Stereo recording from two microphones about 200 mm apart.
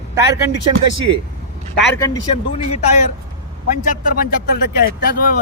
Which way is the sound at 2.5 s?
30° left (ahead or behind).